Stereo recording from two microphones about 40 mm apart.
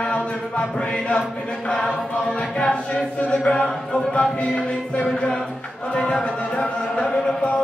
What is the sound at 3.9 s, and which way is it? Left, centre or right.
Music, centre.